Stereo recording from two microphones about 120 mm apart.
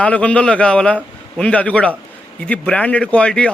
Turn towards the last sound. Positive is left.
turn(degrees=10)  # may be behind; listen again after turning